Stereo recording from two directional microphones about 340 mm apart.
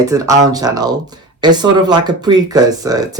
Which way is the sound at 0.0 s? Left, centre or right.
Centre.